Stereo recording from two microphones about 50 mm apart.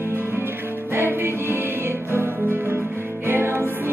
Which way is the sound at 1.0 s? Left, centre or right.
Right.